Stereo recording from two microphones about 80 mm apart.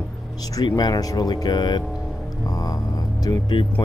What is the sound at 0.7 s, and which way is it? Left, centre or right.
Speech, left.